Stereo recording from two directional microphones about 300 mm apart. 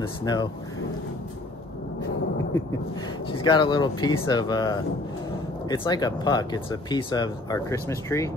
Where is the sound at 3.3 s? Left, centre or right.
Centre.